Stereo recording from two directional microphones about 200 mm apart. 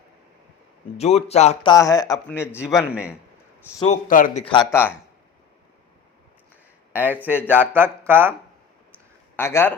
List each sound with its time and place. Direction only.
0.9 s speech: 30° left (ahead or behind)
1.7 s speech: 15° left (ahead or behind)
2.6 s a man's voice: 5° right (ahead or behind)
3.8 s speech: 40° left (ahead or behind)
4.4 s speech: 25° left (ahead or behind)
4.7 s speech: 10° left (ahead or behind)
6.9 s speech: 10° right (ahead or behind)
9.3 s a man's voice: 10° left (ahead or behind)